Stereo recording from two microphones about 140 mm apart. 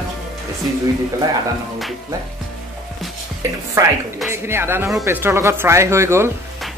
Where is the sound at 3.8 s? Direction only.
25° right (ahead or behind).